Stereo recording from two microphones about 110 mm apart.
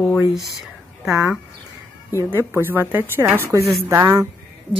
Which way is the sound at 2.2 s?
20° right (ahead or behind).